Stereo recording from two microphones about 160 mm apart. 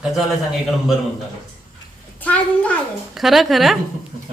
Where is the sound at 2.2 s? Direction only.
10° left (ahead or behind).